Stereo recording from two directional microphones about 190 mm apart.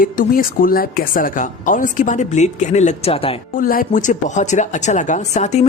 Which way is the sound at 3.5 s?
50° left (ahead or behind).